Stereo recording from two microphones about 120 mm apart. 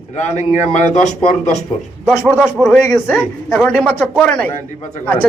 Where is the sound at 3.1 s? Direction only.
5° left (ahead or behind).